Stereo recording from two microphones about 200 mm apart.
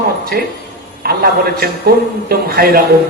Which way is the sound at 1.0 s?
50° right (ahead or behind).